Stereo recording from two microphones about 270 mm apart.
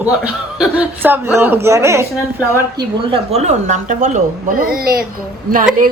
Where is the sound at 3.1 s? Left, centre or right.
Right.